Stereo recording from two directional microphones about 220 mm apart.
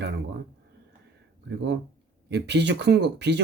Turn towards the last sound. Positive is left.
turn(degrees=-50)  # may be behind; listen again after turning